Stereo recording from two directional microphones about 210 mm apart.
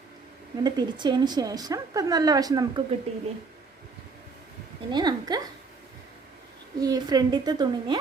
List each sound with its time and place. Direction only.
0.6 s a woman's voice: 20° right (ahead or behind)
3.1 s a woman's voice: 30° right (ahead or behind)
4.9 s a woman's voice: 20° right (ahead or behind)
6.7 s a woman's voice: 20° right (ahead or behind)